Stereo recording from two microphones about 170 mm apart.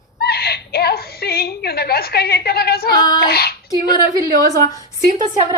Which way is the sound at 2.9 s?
25° left (ahead or behind).